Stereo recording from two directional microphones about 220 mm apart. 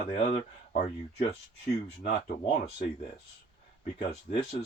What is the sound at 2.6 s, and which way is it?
Speech, 40° left (ahead or behind).